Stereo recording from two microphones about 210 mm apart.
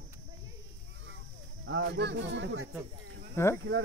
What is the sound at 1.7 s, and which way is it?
Speech, 60° right (ahead or behind).